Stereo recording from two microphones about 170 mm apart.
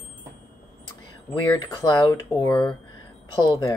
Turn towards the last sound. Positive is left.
turn(degrees=25)  # may be behind; listen again after turning